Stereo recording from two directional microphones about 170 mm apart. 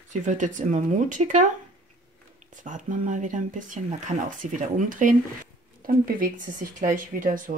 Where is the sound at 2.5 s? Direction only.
50° right (ahead or behind).